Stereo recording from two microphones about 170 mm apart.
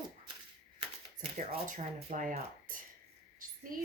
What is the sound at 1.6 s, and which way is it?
Speech, 50° right (ahead or behind).